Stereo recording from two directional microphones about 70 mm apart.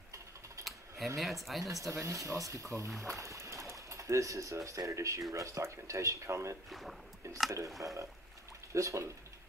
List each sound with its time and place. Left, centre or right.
0.7 s a sound: centre
1.6 s speech: right
6.7 s speech: centre
7.2 s speech: right
7.6 s speech: centre
8.7 s speech: right